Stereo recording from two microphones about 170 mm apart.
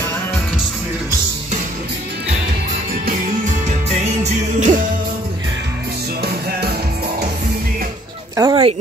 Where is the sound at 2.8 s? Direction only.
55° right (ahead or behind).